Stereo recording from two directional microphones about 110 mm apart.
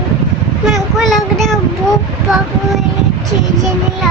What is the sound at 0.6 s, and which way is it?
Child singing, centre (ahead or behind).